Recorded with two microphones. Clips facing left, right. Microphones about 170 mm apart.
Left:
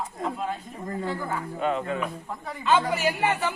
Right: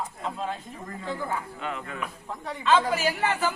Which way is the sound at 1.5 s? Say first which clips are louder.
Left 8 dB; 30° left (ahead or behind).